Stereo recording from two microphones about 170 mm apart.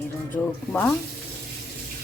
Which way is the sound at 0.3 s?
5° left (ahead or behind).